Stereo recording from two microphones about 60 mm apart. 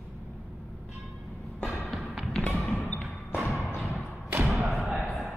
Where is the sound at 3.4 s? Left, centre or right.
Centre.